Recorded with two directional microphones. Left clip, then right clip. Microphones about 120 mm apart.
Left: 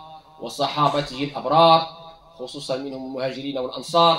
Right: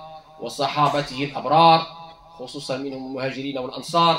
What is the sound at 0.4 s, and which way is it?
Speech, 35° right (ahead or behind).